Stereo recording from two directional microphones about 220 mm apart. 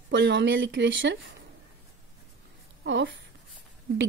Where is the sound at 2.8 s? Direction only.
55° right (ahead or behind).